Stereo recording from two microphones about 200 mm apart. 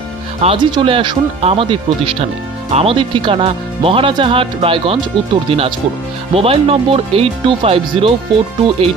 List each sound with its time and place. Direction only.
0.4 s speech: 25° right (ahead or behind)